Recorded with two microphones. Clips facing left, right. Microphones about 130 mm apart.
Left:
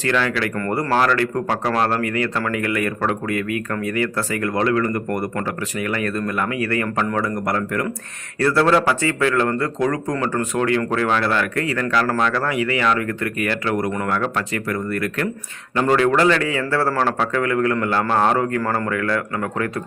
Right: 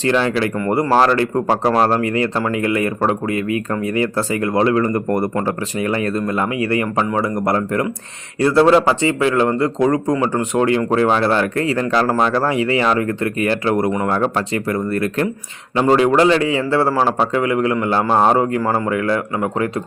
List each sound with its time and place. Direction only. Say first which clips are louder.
0.0 s speech: right 4 dB; 25° right (ahead or behind)
15.9 s speech: right 3 dB; 20° right (ahead or behind)